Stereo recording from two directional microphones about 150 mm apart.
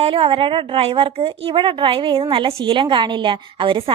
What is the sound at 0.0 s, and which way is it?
A woman's voice, 35° right (ahead or behind).